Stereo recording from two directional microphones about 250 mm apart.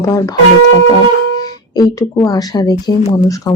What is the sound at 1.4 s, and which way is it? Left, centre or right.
Speech, centre.